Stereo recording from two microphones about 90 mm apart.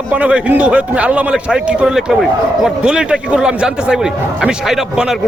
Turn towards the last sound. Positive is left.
turn(degrees=-5)  # may be behind; listen again after turning